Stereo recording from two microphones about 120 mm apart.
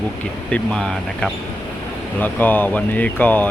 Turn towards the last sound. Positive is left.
turn(degrees=15)  # may be behind; listen again after turning